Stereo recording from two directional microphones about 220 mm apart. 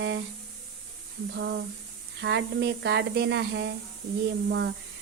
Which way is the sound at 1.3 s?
55° right (ahead or behind).